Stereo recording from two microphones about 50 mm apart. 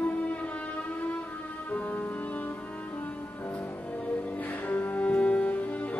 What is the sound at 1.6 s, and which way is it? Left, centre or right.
Music, left.